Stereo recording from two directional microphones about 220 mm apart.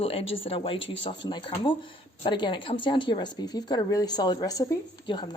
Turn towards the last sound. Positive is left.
turn(degrees=20)  # may be behind; listen again after turning